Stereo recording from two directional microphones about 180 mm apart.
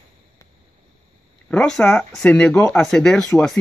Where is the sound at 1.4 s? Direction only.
5° left (ahead or behind).